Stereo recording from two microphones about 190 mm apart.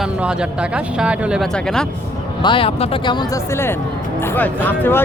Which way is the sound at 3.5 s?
10° left (ahead or behind).